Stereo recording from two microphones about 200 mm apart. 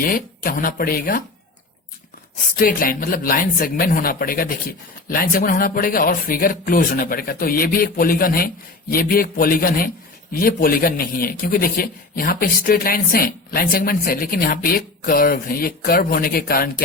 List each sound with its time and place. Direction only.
0.0 s speech: 45° left (ahead or behind)
2.4 s speech: 45° left (ahead or behind)